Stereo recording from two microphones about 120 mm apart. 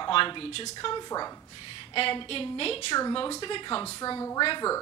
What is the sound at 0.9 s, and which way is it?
Speech, 35° left (ahead or behind).